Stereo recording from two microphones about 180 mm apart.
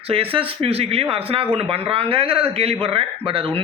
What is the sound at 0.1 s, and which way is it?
Speech, 30° right (ahead or behind).